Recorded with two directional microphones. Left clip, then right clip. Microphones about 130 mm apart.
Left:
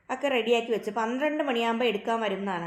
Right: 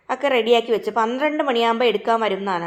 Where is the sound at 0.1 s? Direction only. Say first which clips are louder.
Right 8 dB; 25° right (ahead or behind).